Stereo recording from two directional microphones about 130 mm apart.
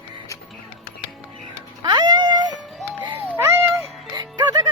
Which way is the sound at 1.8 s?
30° right (ahead or behind).